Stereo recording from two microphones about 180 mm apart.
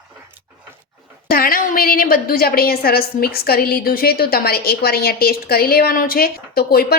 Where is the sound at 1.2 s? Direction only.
55° left (ahead or behind).